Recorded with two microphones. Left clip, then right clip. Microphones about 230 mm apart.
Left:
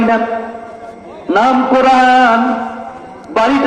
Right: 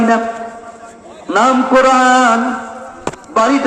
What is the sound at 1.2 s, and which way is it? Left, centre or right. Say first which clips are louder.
A man's voice: left 1 dB; centre.